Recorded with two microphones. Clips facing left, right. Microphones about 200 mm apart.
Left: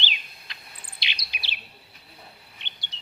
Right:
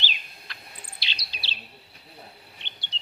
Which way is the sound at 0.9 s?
15° left (ahead or behind).